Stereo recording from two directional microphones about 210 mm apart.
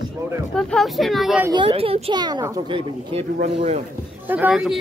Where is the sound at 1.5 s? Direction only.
25° right (ahead or behind).